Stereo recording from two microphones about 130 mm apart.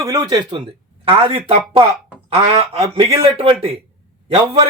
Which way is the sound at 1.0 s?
45° right (ahead or behind).